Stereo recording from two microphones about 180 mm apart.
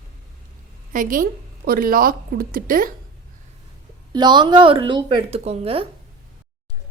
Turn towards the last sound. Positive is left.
turn(degrees=-30)  # may be behind; listen again after turning